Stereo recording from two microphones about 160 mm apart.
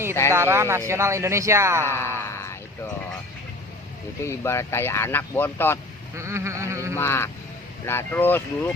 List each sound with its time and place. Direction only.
0.3 s a man's voice: 15° right (ahead or behind)
1.9 s a sound: 15° left (ahead or behind)
4.2 s speech: 15° left (ahead or behind)
6.1 s music: 15° right (ahead or behind)
6.9 s speech: 15° left (ahead or behind)